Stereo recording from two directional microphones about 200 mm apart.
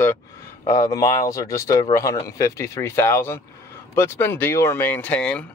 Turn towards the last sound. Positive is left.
turn(degrees=5)  # may be behind; listen again after turning